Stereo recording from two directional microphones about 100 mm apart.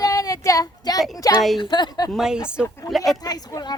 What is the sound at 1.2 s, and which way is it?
Speech, 35° left (ahead or behind).